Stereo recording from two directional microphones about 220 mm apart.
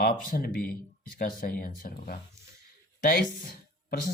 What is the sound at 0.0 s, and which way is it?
Speech, 40° left (ahead or behind).